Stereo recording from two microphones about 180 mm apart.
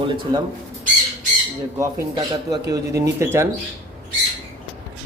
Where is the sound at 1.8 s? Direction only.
20° right (ahead or behind).